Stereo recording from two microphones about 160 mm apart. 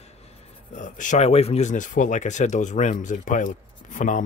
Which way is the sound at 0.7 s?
50° left (ahead or behind).